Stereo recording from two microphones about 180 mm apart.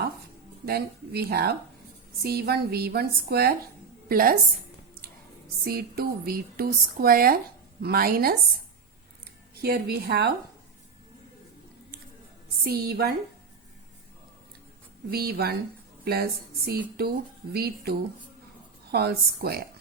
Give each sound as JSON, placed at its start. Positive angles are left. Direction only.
{"t": 0.6, "sound": "a woman's voice", "side_deg": -60}
{"t": 5.6, "sound": "speech", "side_deg": -60}
{"t": 9.6, "sound": "speech", "side_deg": -60}
{"t": 12.6, "sound": "speech", "side_deg": -60}
{"t": 15.1, "sound": "speech", "side_deg": -60}